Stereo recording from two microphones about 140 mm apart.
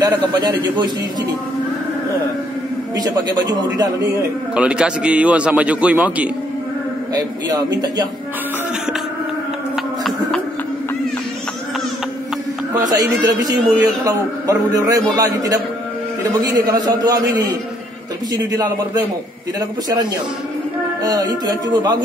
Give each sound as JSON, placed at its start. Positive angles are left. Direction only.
{"t": 0.3, "sound": "a man's voice", "side_deg": -30}
{"t": 3.0, "sound": "a man's voice", "side_deg": -30}
{"t": 4.6, "sound": "a man's voice", "side_deg": -5}
{"t": 7.2, "sound": "a man's voice", "side_deg": -30}
{"t": 12.8, "sound": "a man's voice", "side_deg": -25}
{"t": 21.0, "sound": "a man's voice", "side_deg": -25}